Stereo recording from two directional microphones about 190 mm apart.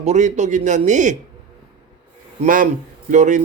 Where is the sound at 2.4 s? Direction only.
45° right (ahead or behind).